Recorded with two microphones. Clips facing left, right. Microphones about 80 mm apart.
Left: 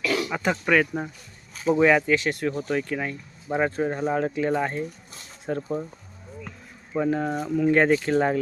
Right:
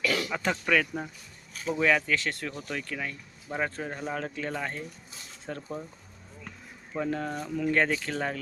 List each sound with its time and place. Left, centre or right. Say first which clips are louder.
0.0 s a sound: left 4 dB; centre
0.6 s speech: left 6 dB; centre
6.9 s speech: left 7 dB; centre